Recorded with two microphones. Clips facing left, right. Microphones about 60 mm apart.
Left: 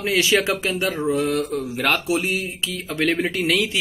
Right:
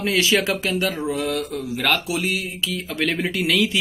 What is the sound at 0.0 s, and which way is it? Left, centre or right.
Speech, left.